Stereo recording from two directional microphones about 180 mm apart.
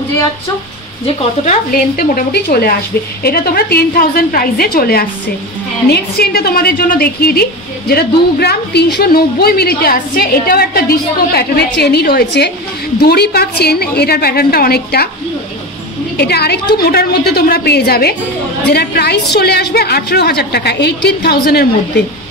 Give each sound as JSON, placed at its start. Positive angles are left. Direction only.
{"t": 1.0, "sound": "speech", "side_deg": 40}
{"t": 1.7, "sound": "a woman's voice", "side_deg": 55}
{"t": 16.2, "sound": "a woman's voice", "side_deg": 65}